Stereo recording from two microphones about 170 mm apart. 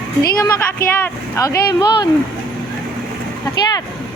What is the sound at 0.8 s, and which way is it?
Speech, 10° left (ahead or behind).